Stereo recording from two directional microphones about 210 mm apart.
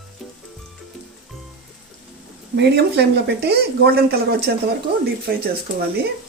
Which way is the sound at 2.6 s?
50° right (ahead or behind).